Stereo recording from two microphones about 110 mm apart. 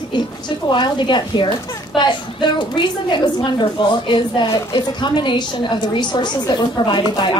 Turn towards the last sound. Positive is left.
turn(degrees=45)  # may be behind; listen again after turning